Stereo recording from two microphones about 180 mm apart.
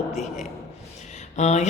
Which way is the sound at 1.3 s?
40° left (ahead or behind).